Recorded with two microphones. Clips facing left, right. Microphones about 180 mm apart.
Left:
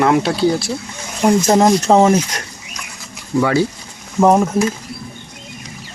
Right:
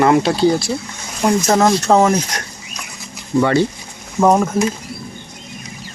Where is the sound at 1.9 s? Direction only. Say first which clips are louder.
Left 2 dB; 25° left (ahead or behind).